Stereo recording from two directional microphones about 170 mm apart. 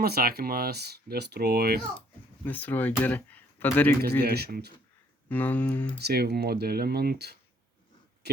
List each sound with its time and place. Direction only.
0.0 s speech: 65° right (ahead or behind)
2.4 s speech: 10° left (ahead or behind)
4.2 s speech: 70° right (ahead or behind)
5.3 s speech: 10° left (ahead or behind)
6.0 s speech: 75° right (ahead or behind)